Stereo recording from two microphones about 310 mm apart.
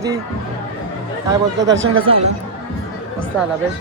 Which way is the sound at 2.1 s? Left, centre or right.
Centre.